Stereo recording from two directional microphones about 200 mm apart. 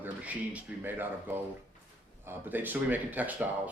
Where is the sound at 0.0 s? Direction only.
10° right (ahead or behind).